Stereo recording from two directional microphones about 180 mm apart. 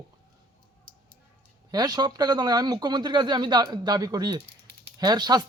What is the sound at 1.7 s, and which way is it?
Speech, 20° right (ahead or behind).